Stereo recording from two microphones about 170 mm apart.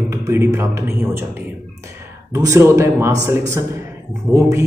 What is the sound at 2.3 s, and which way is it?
Speech, 15° right (ahead or behind).